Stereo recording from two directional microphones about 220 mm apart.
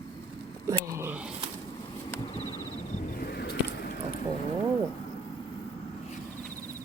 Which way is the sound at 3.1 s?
40° left (ahead or behind).